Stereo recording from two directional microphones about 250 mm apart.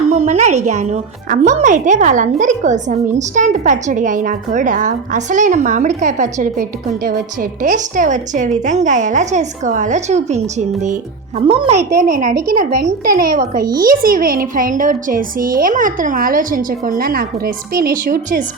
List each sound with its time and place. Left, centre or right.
0.1 s a woman's voice: right
11.8 s a woman's voice: centre
12.5 s a woman's voice: right